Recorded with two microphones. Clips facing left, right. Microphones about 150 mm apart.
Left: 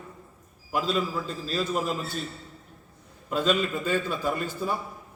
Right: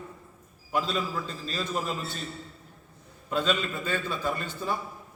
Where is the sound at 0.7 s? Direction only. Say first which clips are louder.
Left 2 dB; 5° left (ahead or behind).